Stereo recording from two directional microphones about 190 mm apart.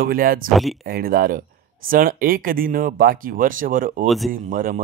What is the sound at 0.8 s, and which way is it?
A man's voice, 50° right (ahead or behind).